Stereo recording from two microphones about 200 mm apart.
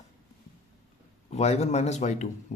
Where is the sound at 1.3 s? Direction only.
35° left (ahead or behind).